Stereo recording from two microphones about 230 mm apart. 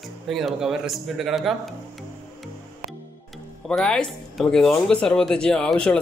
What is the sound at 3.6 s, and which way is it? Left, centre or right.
Speech, centre.